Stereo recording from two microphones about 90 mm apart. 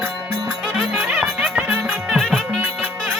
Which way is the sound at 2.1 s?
5° right (ahead or behind).